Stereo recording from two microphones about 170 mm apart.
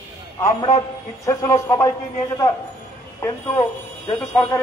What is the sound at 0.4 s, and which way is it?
A man's voice, 20° left (ahead or behind).